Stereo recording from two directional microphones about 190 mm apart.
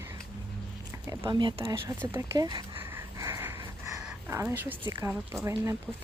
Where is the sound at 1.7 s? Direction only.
10° right (ahead or behind).